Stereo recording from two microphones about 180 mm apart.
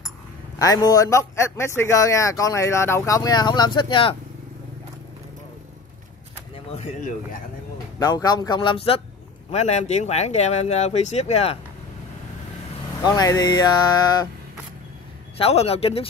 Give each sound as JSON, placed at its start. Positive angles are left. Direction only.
{"t": 0.6, "sound": "a man's voice", "side_deg": 20}
{"t": 6.7, "sound": "speech", "side_deg": 40}
{"t": 8.0, "sound": "speech", "side_deg": 20}
{"t": 13.0, "sound": "speech", "side_deg": 20}
{"t": 15.3, "sound": "speech", "side_deg": 35}